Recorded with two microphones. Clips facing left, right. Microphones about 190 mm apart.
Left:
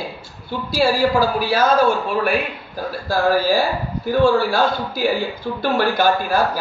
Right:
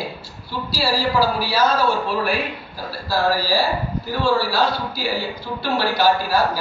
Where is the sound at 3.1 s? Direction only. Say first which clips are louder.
Left 3 dB; 50° left (ahead or behind).